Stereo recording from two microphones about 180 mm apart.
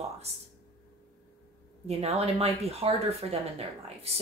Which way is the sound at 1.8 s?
35° right (ahead or behind).